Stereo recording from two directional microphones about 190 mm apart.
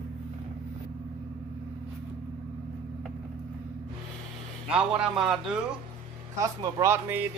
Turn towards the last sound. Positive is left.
turn(degrees=-10)  # may be behind; listen again after turning